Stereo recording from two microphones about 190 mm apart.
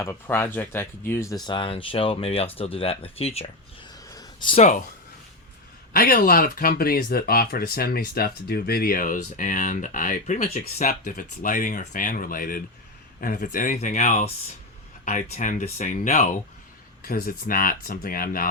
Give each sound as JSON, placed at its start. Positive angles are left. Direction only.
{"t": 0.0, "sound": "speech", "side_deg": 15}
{"t": 4.1, "sound": "a sound", "side_deg": 20}
{"t": 5.9, "sound": "speech", "side_deg": 50}